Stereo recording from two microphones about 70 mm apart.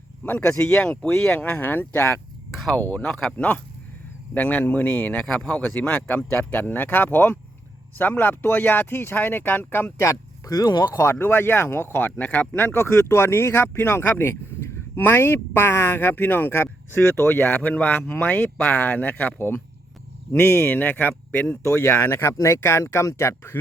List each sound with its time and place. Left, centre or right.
0.3 s speech: left
3.0 s speech: centre; by 9.9 s left
10.5 s speech: left
11.1 s speech: left
12.6 s speech: left
22.4 s speech: left